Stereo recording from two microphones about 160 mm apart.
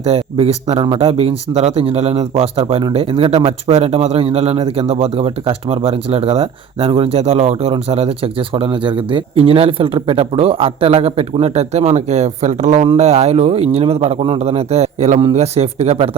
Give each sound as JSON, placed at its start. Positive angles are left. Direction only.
{"t": 0.0, "sound": "speech", "side_deg": -40}